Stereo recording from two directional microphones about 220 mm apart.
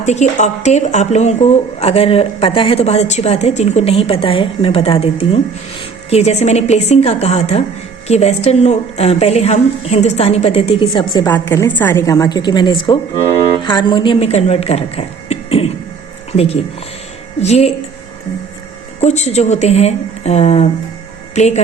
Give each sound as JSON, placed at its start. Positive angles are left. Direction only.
{"t": 0.0, "sound": "a woman's voice", "side_deg": 30}
{"t": 18.9, "sound": "speech", "side_deg": 30}